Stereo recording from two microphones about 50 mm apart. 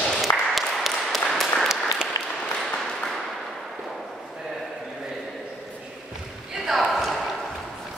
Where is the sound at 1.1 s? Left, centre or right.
Centre.